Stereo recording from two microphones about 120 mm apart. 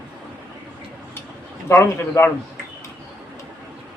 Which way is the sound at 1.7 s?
20° left (ahead or behind).